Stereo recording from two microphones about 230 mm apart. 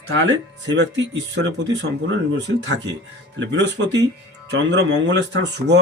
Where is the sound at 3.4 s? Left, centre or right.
Right.